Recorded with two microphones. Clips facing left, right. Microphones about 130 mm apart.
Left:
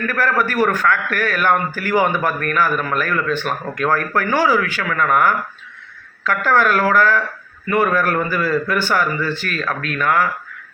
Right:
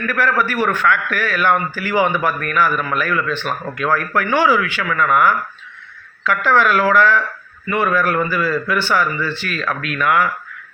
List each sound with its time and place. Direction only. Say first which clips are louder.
0.1 s a man's voice: right 2 dB; 45° left (ahead or behind)